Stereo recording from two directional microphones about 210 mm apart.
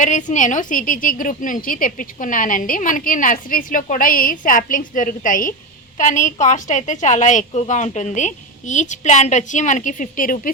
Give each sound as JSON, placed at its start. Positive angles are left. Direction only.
{"t": 0.0, "sound": "a woman's voice", "side_deg": 35}